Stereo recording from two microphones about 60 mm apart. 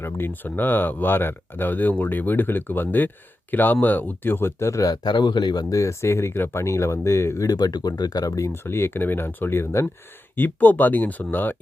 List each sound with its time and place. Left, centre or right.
0.0 s speech: left
5.6 s speech: left
7.4 s speech: left
8.5 s speech: left